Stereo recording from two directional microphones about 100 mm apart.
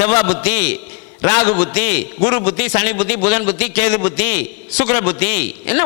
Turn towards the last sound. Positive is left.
turn(degrees=20)  # may be behind; listen again after turning